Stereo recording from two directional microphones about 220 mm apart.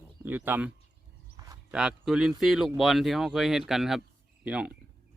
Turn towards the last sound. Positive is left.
turn(degrees=-5)  # may be behind; listen again after turning